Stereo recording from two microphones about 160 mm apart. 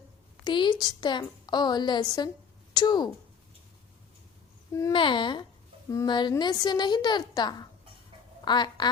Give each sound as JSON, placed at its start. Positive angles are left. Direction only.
{"t": 0.4, "sound": "a woman's voice", "side_deg": 30}
{"t": 4.9, "sound": "a woman's voice", "side_deg": 30}